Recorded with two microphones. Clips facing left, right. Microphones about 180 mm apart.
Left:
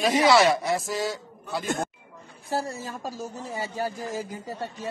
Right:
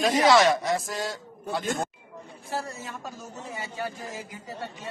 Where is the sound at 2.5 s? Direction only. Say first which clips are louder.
Left 4 dB; 35° left (ahead or behind).